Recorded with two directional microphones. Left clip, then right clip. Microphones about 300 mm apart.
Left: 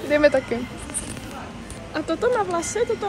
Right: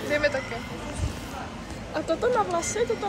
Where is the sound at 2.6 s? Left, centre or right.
Left.